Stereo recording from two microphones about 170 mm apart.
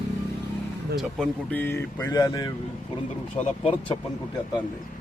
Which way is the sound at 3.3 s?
40° left (ahead or behind).